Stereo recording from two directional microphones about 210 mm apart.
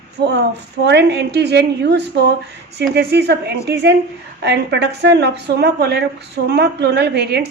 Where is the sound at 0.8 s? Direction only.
55° right (ahead or behind).